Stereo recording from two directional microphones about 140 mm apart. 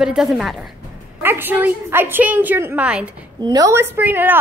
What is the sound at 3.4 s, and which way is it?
Speech, 25° right (ahead or behind).